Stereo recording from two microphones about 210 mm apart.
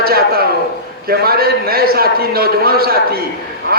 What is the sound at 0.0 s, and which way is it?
A man's voice, 45° right (ahead or behind).